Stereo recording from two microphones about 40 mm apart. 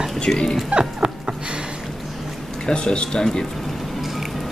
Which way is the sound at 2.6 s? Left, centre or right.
Left.